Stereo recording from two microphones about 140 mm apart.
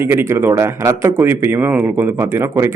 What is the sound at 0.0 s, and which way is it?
A man's voice, 15° right (ahead or behind).